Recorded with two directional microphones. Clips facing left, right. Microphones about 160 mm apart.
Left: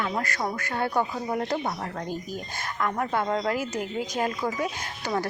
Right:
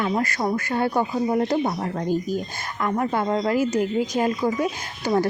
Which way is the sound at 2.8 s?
5° right (ahead or behind).